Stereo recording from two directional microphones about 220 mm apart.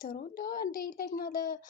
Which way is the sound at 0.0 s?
40° left (ahead or behind).